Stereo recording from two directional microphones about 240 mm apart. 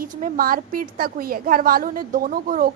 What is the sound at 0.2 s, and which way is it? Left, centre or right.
A woman's voice, right.